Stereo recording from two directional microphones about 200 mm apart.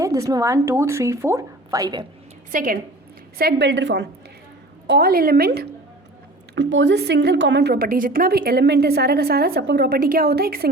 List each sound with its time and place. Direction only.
0.0 s a woman's voice: 15° right (ahead or behind)
2.5 s a woman's voice: 45° right (ahead or behind)
3.3 s a woman's voice: 55° right (ahead or behind)
6.6 s a woman's voice: 65° right (ahead or behind)